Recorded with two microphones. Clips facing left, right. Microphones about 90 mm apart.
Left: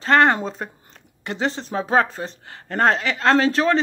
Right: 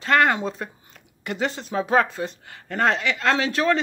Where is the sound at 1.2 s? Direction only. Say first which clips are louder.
Left 2 dB; 30° left (ahead or behind).